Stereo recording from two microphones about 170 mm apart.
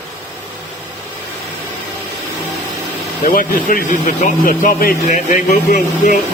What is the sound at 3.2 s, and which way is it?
Speech, 55° left (ahead or behind).